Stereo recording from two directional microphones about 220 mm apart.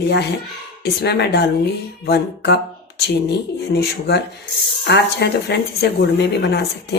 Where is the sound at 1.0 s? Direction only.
50° left (ahead or behind).